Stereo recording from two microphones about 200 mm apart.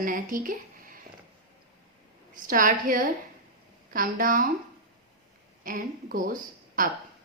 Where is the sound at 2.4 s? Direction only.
45° right (ahead or behind).